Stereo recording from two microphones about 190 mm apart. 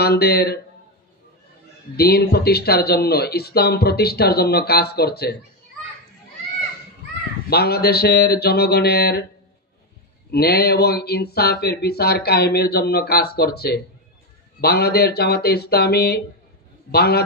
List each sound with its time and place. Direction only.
0.0 s speech: 55° left (ahead or behind)
2.0 s speech: 55° left (ahead or behind)
7.4 s speech: 55° left (ahead or behind)
10.3 s speech: 55° left (ahead or behind)